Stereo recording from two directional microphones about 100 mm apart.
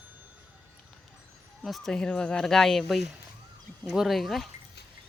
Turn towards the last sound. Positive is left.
turn(degrees=0)  # may be behind; listen again after turning